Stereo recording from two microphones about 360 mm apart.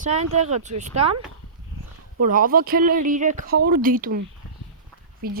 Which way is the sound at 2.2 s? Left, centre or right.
Right.